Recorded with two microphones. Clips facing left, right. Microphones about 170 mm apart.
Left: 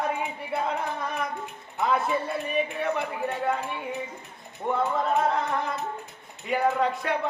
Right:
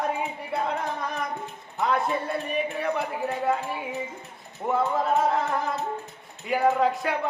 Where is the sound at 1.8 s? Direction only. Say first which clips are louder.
Even; centre (ahead or behind).